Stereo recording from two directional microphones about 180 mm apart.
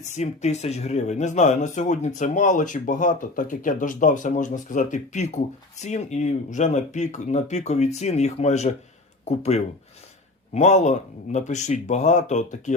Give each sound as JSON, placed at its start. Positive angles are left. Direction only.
{"t": 0.1, "sound": "speech", "side_deg": 40}